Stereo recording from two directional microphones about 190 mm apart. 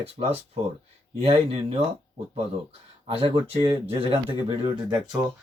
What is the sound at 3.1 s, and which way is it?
Speech, 30° right (ahead or behind).